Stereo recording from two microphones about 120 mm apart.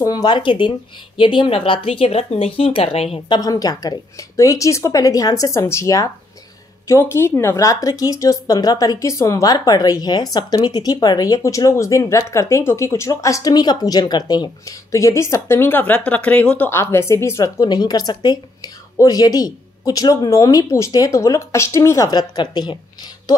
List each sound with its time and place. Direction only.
0.0 s speech: 35° left (ahead or behind); by 3.2 s 55° left (ahead or behind)
3.3 s a woman's voice: 30° left (ahead or behind)